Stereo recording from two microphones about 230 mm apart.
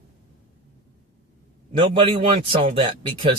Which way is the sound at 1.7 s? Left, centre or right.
Right.